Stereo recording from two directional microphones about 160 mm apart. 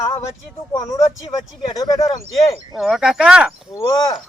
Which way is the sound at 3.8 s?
20° left (ahead or behind).